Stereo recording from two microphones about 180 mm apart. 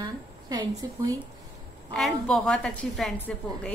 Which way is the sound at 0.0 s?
20° right (ahead or behind).